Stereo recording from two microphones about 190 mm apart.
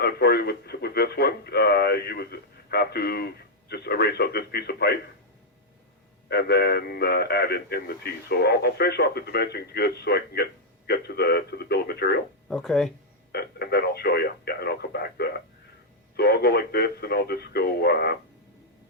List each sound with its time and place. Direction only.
0.0 s a man's voice: 60° left (ahead or behind)
6.2 s a man's voice: 60° left (ahead or behind)
12.5 s speech: centre (ahead or behind)
13.3 s a man's voice: 55° left (ahead or behind)